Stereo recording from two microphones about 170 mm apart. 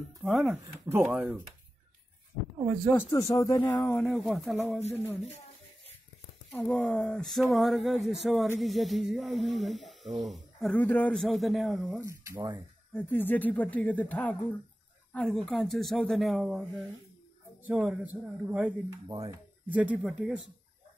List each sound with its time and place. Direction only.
0.2 s a man's voice: centre (ahead or behind)
0.8 s a man's voice: 15° right (ahead or behind)
3.1 s speech: 20° left (ahead or behind)
3.9 s a man's voice: centre (ahead or behind)
6.5 s a man's voice: 5° left (ahead or behind)
12.0 s a man's voice: 15° right (ahead or behind)
12.9 s a man's voice: 10° left (ahead or behind); by 18.8 s 10° right (ahead or behind)
19.0 s speech: 25° right (ahead or behind)
19.7 s a man's voice: 10° right (ahead or behind)